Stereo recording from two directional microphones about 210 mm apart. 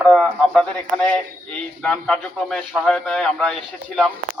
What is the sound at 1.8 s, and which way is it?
A man's voice, 5° left (ahead or behind).